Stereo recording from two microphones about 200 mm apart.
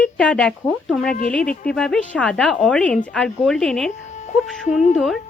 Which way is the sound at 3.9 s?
35° left (ahead or behind).